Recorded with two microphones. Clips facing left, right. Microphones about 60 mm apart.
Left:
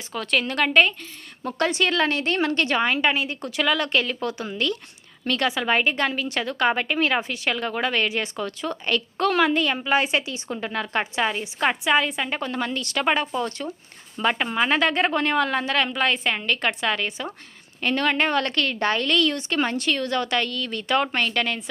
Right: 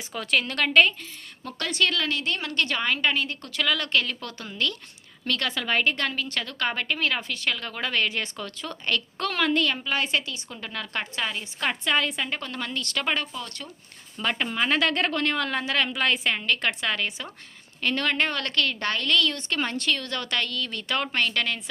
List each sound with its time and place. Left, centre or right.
0.1 s a woman's voice: centre
1.5 s a woman's voice: left
12.0 s a woman's voice: centre; by 13.7 s left
14.2 s a woman's voice: centre